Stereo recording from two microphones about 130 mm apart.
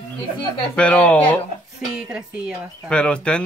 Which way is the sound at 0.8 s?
10° left (ahead or behind).